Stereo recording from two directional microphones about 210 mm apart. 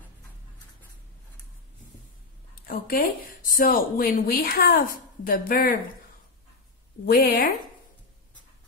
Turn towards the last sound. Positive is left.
turn(degrees=45)  # may be behind; listen again after turning